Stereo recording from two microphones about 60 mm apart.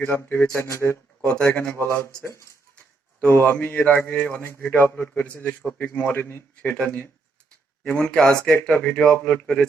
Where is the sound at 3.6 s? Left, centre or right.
Left.